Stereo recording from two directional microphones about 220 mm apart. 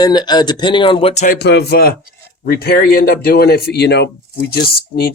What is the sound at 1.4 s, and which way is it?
Speech, 50° left (ahead or behind).